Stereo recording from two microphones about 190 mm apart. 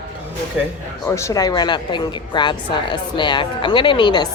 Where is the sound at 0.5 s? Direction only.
5° right (ahead or behind).